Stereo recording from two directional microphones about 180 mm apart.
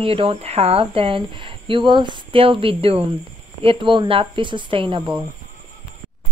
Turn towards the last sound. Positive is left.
turn(degrees=-25)  # may be behind; listen again after turning